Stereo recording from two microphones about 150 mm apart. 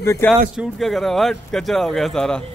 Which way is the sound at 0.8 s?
Centre (ahead or behind).